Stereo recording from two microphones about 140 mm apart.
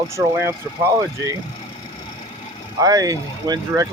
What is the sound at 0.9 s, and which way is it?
Speech, 20° right (ahead or behind).